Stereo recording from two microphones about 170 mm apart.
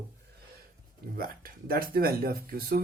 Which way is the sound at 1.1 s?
60° right (ahead or behind).